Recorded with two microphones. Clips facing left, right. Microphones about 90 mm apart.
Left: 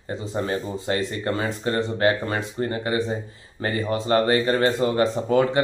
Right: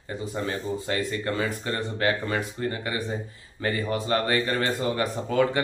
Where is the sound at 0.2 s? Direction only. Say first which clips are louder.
Left 3 dB; 25° left (ahead or behind).